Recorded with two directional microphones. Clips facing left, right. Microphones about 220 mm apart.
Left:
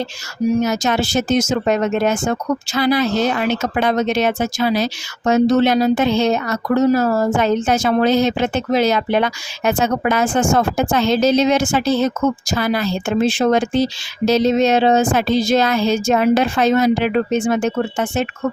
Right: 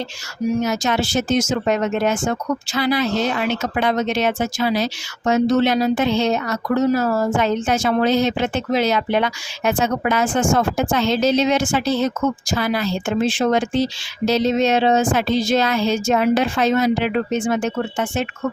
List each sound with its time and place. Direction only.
0.6 s speech: 40° left (ahead or behind)